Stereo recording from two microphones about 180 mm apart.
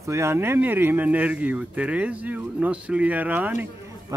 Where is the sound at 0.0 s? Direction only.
15° right (ahead or behind).